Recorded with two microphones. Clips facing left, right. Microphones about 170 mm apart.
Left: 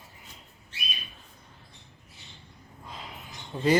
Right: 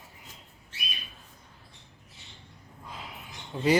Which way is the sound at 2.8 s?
5° right (ahead or behind).